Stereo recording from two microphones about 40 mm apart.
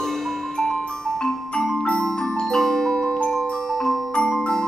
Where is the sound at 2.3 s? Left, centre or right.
Centre.